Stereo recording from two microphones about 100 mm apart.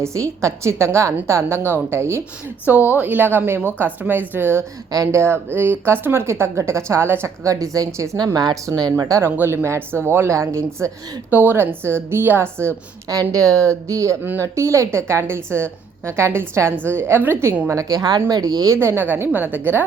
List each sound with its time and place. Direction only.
0.0 s a woman's voice: 30° right (ahead or behind)
2.6 s a woman's voice: 15° right (ahead or behind)
4.9 s a woman's voice: 30° right (ahead or behind)
9.4 s a woman's voice: 20° right (ahead or behind)
11.3 s a woman's voice: 20° right (ahead or behind)
13.1 s a woman's voice: 35° right (ahead or behind); by 17.7 s 20° right (ahead or behind)
17.7 s a woman's voice: 35° right (ahead or behind); by 19.8 s 20° right (ahead or behind)